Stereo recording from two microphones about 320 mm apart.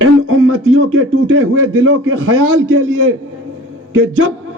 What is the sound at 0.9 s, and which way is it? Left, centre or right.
A man's voice, right.